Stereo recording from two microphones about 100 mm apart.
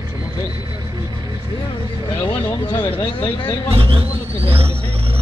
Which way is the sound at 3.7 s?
70° right (ahead or behind).